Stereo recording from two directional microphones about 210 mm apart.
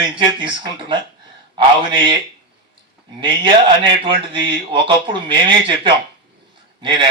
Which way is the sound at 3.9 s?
25° right (ahead or behind).